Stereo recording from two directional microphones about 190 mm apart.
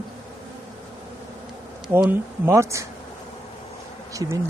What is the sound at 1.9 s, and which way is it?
Bee, 10° right (ahead or behind).